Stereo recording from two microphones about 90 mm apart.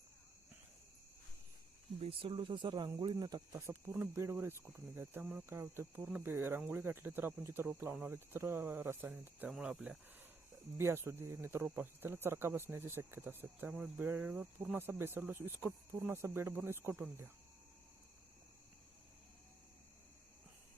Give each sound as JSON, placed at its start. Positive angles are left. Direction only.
{"t": 2.0, "sound": "speech", "side_deg": -80}
{"t": 6.0, "sound": "speech", "side_deg": -15}
{"t": 6.3, "sound": "speech", "side_deg": -25}
{"t": 9.5, "sound": "speech", "side_deg": -5}
{"t": 10.8, "sound": "speech", "side_deg": -30}